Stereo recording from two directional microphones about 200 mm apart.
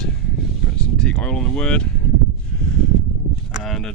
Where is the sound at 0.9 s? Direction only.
5° left (ahead or behind).